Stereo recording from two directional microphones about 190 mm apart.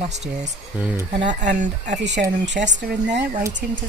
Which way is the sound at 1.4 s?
40° right (ahead or behind).